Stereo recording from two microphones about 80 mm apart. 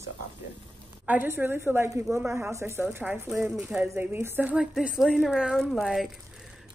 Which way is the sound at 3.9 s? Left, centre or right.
Right.